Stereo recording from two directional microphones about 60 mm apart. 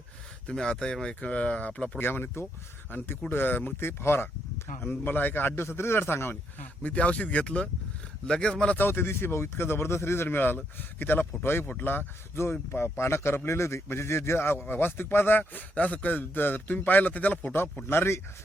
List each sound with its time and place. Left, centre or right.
0.4 s a man's voice: centre
2.0 s speech: left
3.8 s speech: left
6.8 s a man's voice: left
8.8 s speech: left
11.6 s a man's voice: left
11.9 s a man's voice: left
17.8 s speech: left